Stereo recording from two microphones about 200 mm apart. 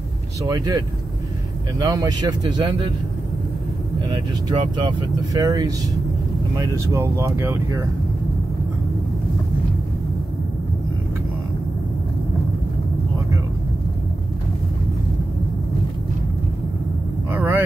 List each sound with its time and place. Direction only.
0.5 s speech: 20° right (ahead or behind)
4.1 s speech: 25° right (ahead or behind)
17.3 s vehicle: 10° right (ahead or behind)